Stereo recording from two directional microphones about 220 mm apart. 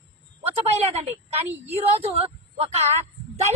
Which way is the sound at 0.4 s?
25° right (ahead or behind).